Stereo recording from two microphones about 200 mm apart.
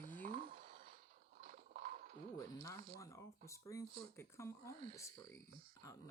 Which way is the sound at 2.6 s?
15° left (ahead or behind).